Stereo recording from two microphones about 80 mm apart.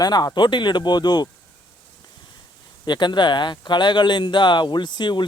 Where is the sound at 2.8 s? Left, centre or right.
Left.